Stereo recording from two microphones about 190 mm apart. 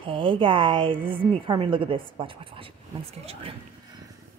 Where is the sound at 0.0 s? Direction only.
25° right (ahead or behind).